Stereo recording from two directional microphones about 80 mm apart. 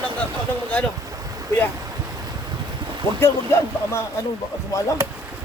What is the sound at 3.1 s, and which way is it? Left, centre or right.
Speech, left.